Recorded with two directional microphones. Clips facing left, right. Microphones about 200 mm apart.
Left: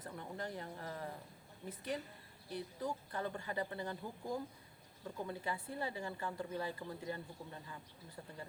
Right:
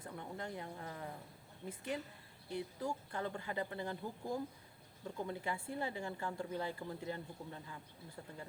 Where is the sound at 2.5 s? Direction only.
10° right (ahead or behind).